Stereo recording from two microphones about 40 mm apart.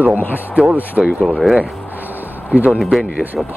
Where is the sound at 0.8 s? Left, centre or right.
Right.